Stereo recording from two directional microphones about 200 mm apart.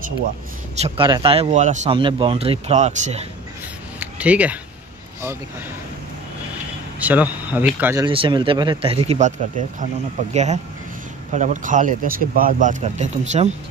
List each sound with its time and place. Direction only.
0.8 s speech: 25° right (ahead or behind)
2.0 s speech: 25° right (ahead or behind)
4.0 s speech: 5° right (ahead or behind)
7.0 s speech: 10° right (ahead or behind)
8.1 s speech: 25° right (ahead or behind)
10.3 s speech: 35° right (ahead or behind)